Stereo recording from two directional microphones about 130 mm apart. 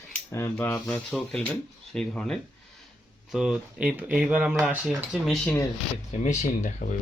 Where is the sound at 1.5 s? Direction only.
5° left (ahead or behind).